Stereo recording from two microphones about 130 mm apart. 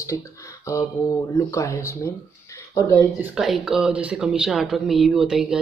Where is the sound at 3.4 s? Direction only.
Centre (ahead or behind).